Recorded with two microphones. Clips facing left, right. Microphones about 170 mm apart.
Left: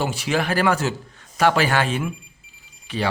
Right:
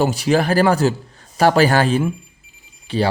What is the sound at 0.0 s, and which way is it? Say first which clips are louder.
Speech: right 6 dB; 40° right (ahead or behind).